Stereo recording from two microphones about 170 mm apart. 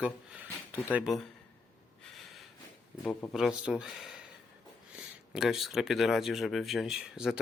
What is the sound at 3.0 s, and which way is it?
Speech, 10° left (ahead or behind).